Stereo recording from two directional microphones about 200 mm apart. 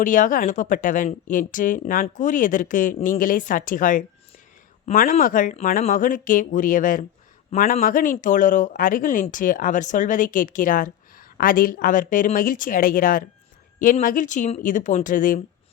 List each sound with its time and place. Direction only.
0.0 s speech: 40° left (ahead or behind)